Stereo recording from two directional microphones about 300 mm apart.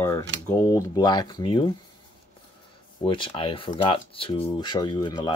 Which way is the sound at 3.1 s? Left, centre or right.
Centre.